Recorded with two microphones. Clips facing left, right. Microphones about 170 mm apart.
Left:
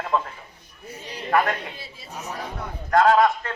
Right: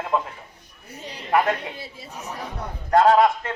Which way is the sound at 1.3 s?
20° right (ahead or behind).